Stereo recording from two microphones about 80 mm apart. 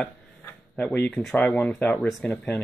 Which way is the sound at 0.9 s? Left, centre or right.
Left.